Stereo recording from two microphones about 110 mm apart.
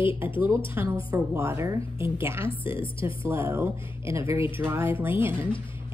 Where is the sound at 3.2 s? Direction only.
25° right (ahead or behind).